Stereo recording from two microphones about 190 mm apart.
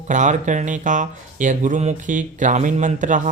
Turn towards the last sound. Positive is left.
turn(degrees=-40)  # may be behind; listen again after turning